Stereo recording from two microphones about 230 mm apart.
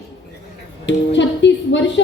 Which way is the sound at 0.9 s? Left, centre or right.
Left.